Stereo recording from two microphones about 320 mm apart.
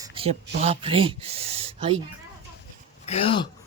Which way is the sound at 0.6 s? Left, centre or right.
Centre.